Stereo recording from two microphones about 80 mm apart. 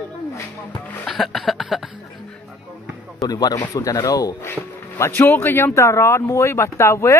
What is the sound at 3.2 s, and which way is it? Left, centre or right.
Speech, left.